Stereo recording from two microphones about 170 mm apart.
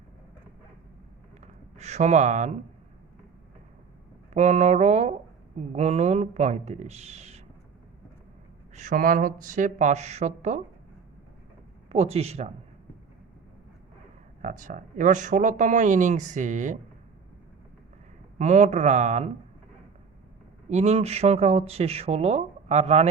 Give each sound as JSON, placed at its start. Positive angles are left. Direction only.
{"t": 1.4, "sound": "a sound", "side_deg": -40}
{"t": 4.4, "sound": "speech", "side_deg": -40}
{"t": 8.7, "sound": "speech", "side_deg": -45}
{"t": 11.9, "sound": "speech", "side_deg": -35}
{"t": 14.4, "sound": "speech", "side_deg": -50}
{"t": 18.3, "sound": "speech", "side_deg": -45}
{"t": 20.7, "sound": "speech", "side_deg": -40}